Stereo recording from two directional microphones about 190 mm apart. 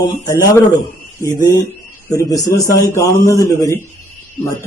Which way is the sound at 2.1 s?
15° left (ahead or behind).